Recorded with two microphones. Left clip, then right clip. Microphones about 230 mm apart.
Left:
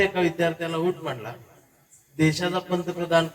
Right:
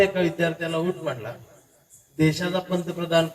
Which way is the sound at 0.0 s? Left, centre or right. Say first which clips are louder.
Right 1 dB; left.